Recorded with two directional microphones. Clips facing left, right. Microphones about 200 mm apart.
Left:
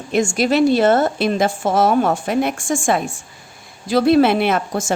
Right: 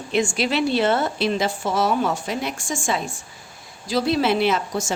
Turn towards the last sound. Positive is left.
turn(degrees=55)  # may be behind; listen again after turning